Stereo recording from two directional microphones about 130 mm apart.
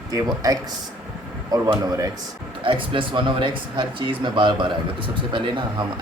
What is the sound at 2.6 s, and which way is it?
Speech, 40° right (ahead or behind).